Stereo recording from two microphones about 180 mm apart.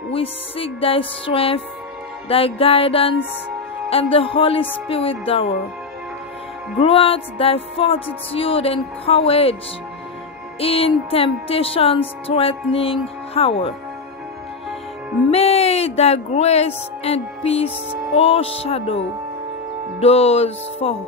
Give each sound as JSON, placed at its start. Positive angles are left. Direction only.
{"t": 0.1, "sound": "speech", "side_deg": 30}
{"t": 6.8, "sound": "speech", "side_deg": 30}
{"t": 10.6, "sound": "speech", "side_deg": 30}
{"t": 15.3, "sound": "speech", "side_deg": 35}